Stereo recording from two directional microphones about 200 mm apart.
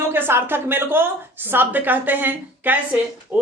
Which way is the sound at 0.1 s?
10° right (ahead or behind).